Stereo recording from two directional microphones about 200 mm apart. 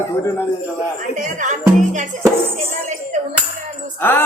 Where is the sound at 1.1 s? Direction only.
40° right (ahead or behind).